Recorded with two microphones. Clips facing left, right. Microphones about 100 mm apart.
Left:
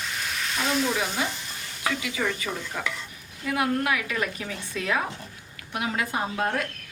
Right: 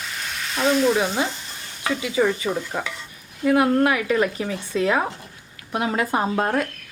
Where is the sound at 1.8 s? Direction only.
25° right (ahead or behind).